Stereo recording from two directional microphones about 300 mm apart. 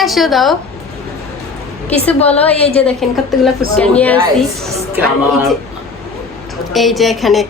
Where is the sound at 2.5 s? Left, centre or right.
Centre.